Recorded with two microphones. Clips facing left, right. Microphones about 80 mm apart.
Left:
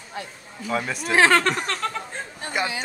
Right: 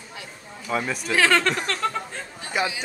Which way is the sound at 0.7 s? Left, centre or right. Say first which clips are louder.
Even; centre.